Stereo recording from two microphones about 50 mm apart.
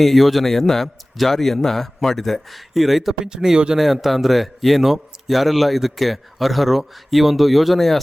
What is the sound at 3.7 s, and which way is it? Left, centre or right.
A man's voice, centre.